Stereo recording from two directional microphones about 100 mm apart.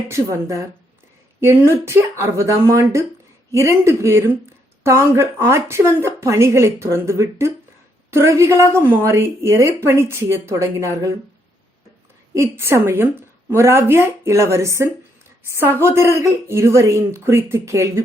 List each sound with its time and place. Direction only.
0.1 s speech: 30° right (ahead or behind)
12.3 s speech: 30° right (ahead or behind)